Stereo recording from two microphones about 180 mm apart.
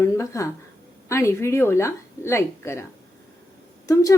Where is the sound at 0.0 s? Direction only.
15° left (ahead or behind).